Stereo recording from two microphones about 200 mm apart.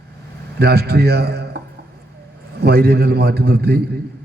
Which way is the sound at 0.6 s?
50° right (ahead or behind).